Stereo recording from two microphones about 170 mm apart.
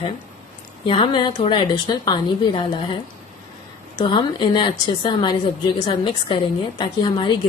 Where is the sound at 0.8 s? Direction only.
30° left (ahead or behind).